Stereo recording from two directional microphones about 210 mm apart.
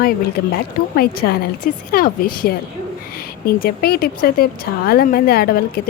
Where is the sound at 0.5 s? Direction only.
45° left (ahead or behind).